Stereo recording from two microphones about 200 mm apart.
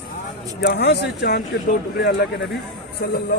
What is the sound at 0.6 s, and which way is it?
Speech, 55° left (ahead or behind).